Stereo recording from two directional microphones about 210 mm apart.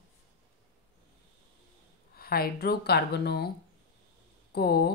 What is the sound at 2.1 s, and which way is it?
Speech, 45° left (ahead or behind).